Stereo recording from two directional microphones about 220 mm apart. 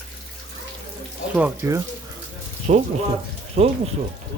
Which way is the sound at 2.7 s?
30° right (ahead or behind).